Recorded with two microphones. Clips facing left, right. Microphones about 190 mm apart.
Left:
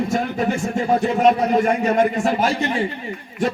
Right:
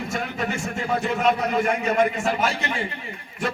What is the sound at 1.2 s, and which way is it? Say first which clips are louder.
A man's voice: left 6 dB; 40° left (ahead or behind).